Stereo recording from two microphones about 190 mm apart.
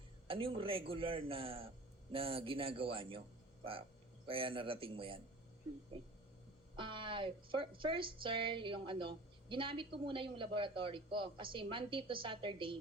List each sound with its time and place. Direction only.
0.3 s speech: 25° right (ahead or behind)
6.7 s speech: 25° right (ahead or behind)